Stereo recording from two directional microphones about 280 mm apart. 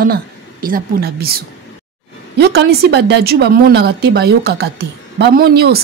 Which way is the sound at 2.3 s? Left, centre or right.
Right.